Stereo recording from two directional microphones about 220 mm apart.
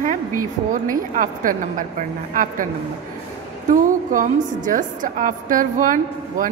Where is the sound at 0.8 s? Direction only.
35° right (ahead or behind).